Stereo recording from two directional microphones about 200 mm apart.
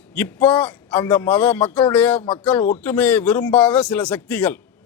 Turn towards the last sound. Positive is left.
turn(degrees=10)  # may be behind; listen again after turning